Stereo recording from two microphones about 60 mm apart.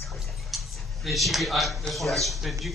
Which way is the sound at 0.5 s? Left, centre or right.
Centre.